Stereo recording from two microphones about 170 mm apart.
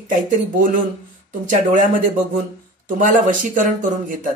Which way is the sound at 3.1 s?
50° right (ahead or behind).